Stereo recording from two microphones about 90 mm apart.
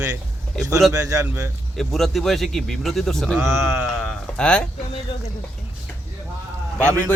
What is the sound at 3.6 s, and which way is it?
Speech, 25° right (ahead or behind).